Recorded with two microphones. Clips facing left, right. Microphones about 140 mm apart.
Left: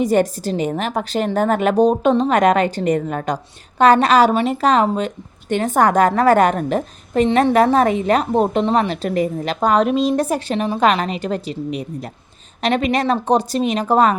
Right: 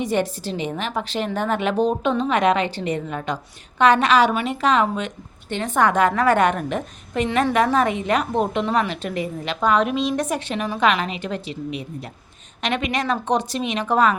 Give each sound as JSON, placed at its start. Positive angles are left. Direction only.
{"t": 0.0, "sound": "a woman's voice", "side_deg": 40}